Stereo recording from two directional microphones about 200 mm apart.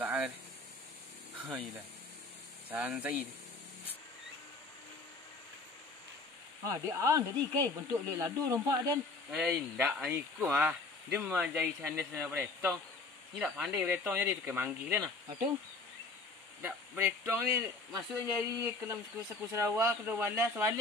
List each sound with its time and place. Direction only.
0.0 s a sound: 10° right (ahead or behind)
2.7 s speech: 5° right (ahead or behind)
6.6 s speech: 15° right (ahead or behind)
9.3 s speech: 5° right (ahead or behind)
16.6 s speech: 10° right (ahead or behind)